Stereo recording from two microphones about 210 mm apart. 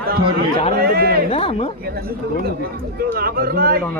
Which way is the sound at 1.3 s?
30° left (ahead or behind).